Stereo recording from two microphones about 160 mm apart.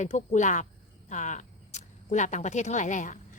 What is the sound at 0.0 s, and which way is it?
Speech, 50° left (ahead or behind).